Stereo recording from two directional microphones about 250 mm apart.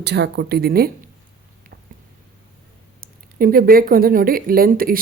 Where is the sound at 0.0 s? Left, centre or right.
Right.